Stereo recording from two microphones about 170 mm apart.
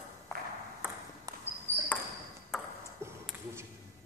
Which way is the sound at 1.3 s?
20° right (ahead or behind).